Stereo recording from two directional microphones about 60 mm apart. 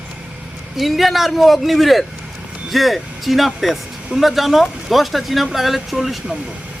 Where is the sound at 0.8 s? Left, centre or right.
Centre.